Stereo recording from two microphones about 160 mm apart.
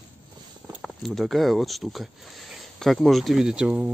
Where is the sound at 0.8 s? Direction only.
Centre (ahead or behind).